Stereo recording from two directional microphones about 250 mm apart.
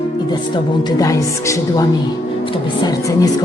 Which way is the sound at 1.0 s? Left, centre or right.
Centre.